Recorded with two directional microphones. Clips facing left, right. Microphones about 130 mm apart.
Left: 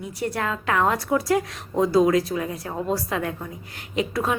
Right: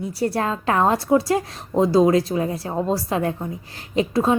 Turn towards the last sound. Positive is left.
turn(degrees=-25)  # may be behind; listen again after turning